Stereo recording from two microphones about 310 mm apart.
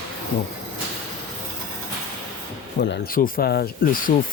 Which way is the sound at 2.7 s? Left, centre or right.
Left.